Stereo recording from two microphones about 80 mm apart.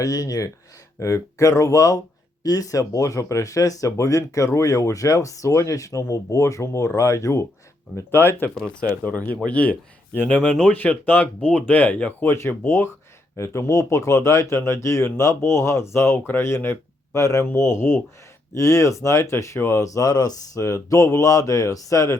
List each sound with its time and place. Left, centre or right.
0.0 s speech: left
7.9 s speech: left
8.5 s speech: centre
8.9 s speech: centre
12.3 s speech: left
17.4 s speech: left